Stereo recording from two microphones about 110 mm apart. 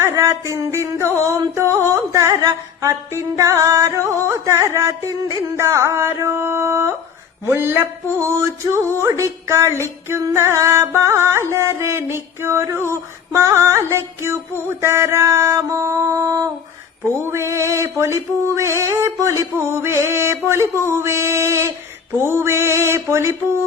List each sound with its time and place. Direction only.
0.0 s music: 25° right (ahead or behind)
17.2 s music: 25° right (ahead or behind)